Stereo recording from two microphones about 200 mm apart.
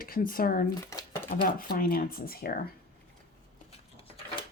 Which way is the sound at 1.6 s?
45° left (ahead or behind).